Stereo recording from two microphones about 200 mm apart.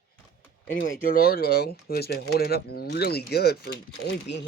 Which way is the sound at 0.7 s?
45° left (ahead or behind).